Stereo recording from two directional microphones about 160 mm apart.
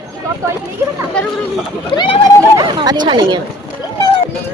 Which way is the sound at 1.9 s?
30° left (ahead or behind).